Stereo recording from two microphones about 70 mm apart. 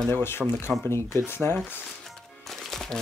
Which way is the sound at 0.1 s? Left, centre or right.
Left.